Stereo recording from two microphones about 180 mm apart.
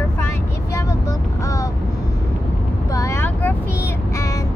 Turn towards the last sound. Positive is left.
turn(degrees=10)  # may be behind; listen again after turning